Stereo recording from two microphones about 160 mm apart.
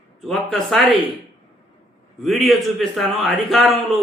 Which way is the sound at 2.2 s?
Centre (ahead or behind).